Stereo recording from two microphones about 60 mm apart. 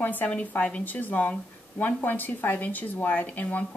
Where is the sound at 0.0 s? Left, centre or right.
Left.